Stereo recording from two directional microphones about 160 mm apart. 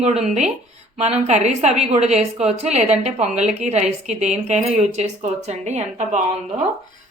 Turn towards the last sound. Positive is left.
turn(degrees=-45)  # may be behind; listen again after turning